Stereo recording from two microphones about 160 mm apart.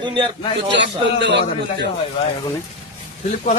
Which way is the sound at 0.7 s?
90° right.